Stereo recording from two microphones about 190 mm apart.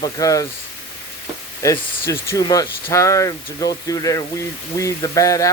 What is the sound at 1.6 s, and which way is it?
Speech, 15° left (ahead or behind).